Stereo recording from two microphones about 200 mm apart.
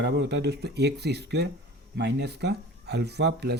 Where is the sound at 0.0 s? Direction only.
55° right (ahead or behind).